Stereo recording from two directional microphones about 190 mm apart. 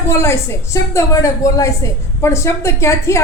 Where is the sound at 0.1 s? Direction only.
15° left (ahead or behind).